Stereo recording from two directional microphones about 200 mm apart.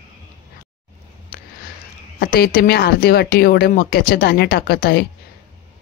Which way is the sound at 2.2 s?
50° left (ahead or behind).